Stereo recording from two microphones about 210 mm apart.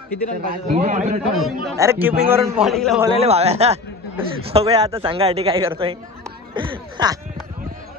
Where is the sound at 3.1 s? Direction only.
30° right (ahead or behind).